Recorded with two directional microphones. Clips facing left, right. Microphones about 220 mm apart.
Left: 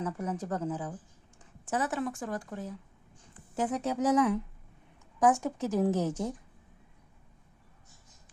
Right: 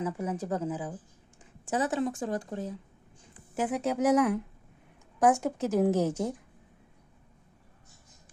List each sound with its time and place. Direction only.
0.0 s a woman's voice: 10° right (ahead or behind)
3.5 s speech: 10° right (ahead or behind)